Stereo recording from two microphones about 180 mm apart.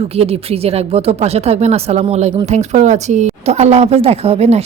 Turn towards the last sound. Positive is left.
turn(degrees=-35)  # may be behind; listen again after turning